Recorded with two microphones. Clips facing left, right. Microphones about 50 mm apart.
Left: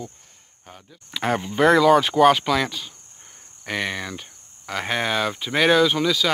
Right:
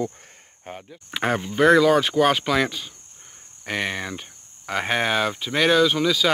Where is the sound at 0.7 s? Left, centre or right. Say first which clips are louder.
Right 7 dB; right.